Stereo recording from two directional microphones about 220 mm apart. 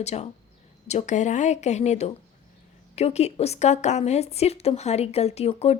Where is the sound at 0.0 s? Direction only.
30° left (ahead or behind).